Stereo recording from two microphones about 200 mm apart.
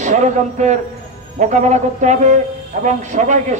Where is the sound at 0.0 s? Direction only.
35° right (ahead or behind).